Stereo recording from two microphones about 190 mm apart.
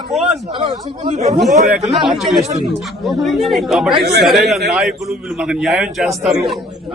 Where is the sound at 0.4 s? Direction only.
25° right (ahead or behind).